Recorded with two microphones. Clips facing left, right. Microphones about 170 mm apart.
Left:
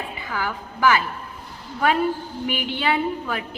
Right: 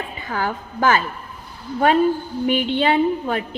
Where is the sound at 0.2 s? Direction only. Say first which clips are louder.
Right 5 dB; 45° right (ahead or behind).